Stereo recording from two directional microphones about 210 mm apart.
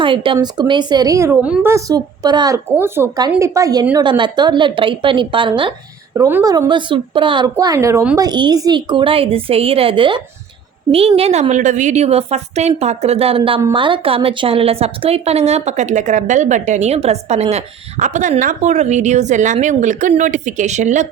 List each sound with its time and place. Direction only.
0.0 s a woman's voice: 25° right (ahead or behind)